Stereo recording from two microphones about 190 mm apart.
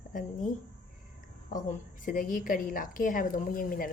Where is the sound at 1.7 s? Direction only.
45° left (ahead or behind).